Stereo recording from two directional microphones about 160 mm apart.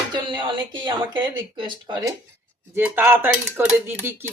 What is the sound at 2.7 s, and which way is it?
Dishes, 15° right (ahead or behind).